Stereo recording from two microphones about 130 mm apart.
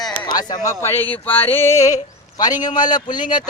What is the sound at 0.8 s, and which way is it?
Speech, 15° left (ahead or behind).